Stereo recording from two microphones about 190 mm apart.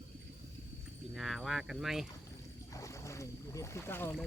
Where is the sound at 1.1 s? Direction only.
Centre (ahead or behind).